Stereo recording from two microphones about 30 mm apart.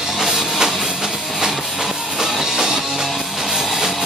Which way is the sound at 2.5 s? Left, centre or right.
Centre.